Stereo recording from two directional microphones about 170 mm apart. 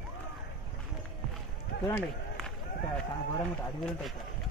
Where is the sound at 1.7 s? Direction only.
70° left (ahead or behind).